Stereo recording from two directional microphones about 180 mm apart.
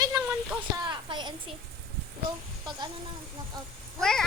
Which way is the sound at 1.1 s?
25° right (ahead or behind).